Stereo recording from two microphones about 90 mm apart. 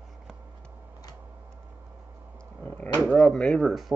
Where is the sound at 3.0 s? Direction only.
15° left (ahead or behind).